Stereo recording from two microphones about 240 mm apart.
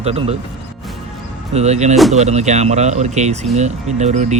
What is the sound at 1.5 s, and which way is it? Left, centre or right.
Speech, right.